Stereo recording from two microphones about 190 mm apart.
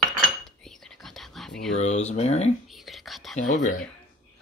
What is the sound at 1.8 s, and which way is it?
Speech, 35° left (ahead or behind).